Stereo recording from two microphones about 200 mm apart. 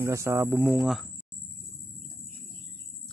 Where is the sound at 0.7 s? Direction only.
Centre (ahead or behind).